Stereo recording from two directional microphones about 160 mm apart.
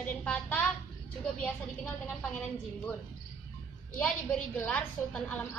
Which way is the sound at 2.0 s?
10° left (ahead or behind).